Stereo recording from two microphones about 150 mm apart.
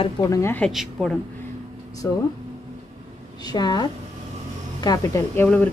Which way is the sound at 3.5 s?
30° left (ahead or behind).